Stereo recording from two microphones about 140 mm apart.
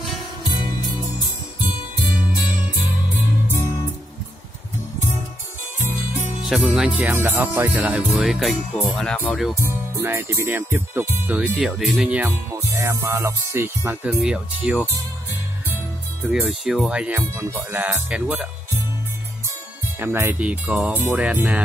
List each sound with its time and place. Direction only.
6.4 s speech: centre (ahead or behind)
9.6 s speech: 15° right (ahead or behind)
14.0 s speech: 5° right (ahead or behind)
16.3 s speech: 5° right (ahead or behind)
20.0 s speech: 15° right (ahead or behind)